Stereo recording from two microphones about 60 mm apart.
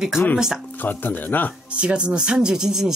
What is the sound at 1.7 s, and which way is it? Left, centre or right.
Speech, centre.